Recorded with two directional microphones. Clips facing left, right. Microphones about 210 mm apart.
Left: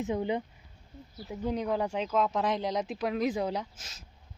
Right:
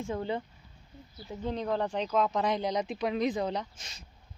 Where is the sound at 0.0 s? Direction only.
15° left (ahead or behind).